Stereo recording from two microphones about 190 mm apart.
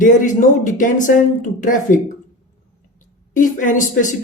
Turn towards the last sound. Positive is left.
turn(degrees=40)  # may be behind; listen again after turning